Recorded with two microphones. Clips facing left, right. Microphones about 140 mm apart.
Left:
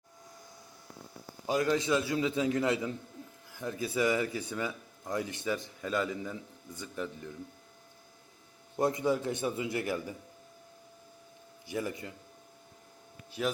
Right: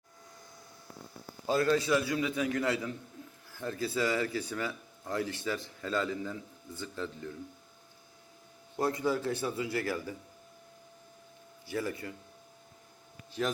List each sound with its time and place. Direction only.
1.5 s a man's voice: 15° left (ahead or behind)
8.7 s a man's voice: 20° left (ahead or behind)
11.6 s a man's voice: 20° left (ahead or behind)
13.4 s a man's voice: 5° left (ahead or behind)